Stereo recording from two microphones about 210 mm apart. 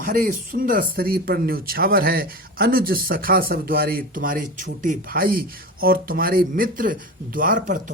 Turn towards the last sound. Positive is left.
turn(degrees=-40)  # may be behind; listen again after turning